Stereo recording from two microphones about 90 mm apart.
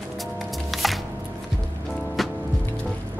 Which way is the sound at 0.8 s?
Centre (ahead or behind).